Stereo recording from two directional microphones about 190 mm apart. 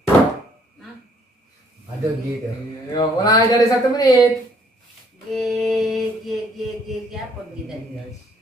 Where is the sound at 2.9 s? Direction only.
20° left (ahead or behind).